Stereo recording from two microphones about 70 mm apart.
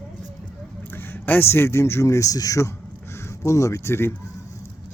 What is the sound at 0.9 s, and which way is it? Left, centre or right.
Speech, left.